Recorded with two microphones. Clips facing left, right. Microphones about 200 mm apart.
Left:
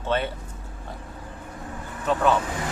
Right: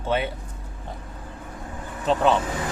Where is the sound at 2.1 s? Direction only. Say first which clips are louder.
Right 2 dB; 25° right (ahead or behind).